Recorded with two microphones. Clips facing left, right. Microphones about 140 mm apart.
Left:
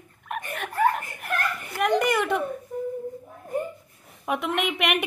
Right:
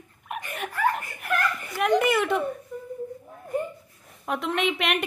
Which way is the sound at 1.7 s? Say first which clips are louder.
Right 1 dB; centre (ahead or behind).